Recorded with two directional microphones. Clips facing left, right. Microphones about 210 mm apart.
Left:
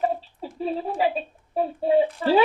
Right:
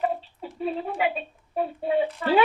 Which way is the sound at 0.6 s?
30° left (ahead or behind).